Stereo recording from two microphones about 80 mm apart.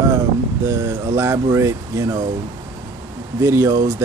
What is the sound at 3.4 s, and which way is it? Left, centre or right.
Speech, right.